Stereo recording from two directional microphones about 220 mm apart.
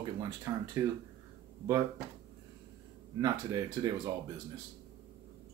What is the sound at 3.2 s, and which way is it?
Speech, 15° right (ahead or behind).